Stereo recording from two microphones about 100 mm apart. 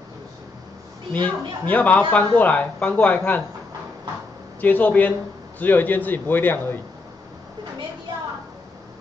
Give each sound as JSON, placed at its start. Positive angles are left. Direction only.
{"t": 1.2, "sound": "speech", "side_deg": 15}
{"t": 4.6, "sound": "a man's voice", "side_deg": 15}